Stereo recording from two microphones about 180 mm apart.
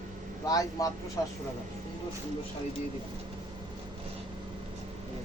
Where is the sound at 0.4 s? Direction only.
20° left (ahead or behind).